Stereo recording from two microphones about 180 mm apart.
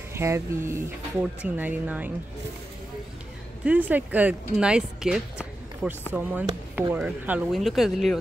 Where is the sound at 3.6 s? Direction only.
10° right (ahead or behind).